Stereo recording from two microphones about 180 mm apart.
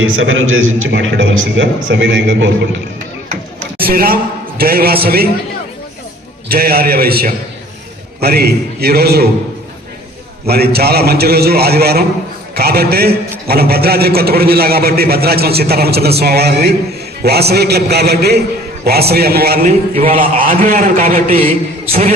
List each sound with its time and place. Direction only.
0.0 s a man's voice: 90° right
3.8 s a man's voice: 55° right (ahead or behind)
6.5 s a man's voice: 55° right (ahead or behind)
10.4 s a man's voice: 60° right (ahead or behind)